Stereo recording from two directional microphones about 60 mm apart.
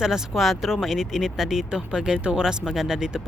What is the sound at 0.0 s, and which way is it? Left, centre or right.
Speech, centre.